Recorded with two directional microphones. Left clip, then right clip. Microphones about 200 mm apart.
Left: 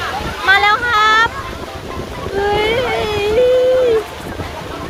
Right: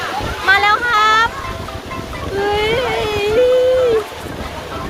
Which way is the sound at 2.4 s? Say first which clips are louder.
Left 1 dB; centre (ahead or behind).